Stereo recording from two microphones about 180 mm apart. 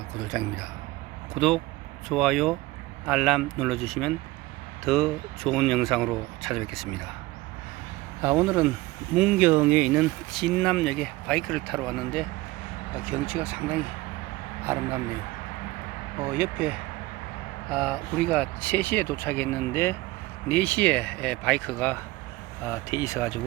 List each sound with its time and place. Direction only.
0.2 s speech: 5° right (ahead or behind)
8.2 s speech: 10° right (ahead or behind)
16.2 s speech: 10° right (ahead or behind)
17.7 s speech: 5° left (ahead or behind)